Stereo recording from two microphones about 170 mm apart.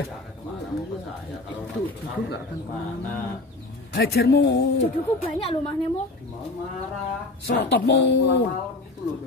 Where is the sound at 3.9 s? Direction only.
70° left (ahead or behind); by 4.6 s 85° left.